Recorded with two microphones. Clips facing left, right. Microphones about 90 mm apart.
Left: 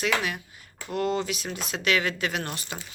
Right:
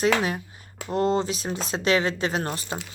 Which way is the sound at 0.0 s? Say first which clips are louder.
Right 5 dB; 35° right (ahead or behind).